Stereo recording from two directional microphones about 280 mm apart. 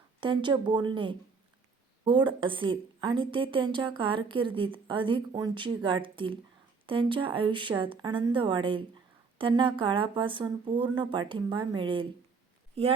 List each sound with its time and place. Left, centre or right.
0.2 s a woman's voice: centre